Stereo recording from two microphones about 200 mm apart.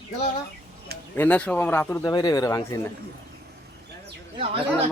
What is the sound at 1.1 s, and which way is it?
Speech, 5° left (ahead or behind).